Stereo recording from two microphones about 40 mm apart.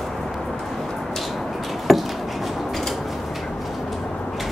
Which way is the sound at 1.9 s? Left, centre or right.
Centre.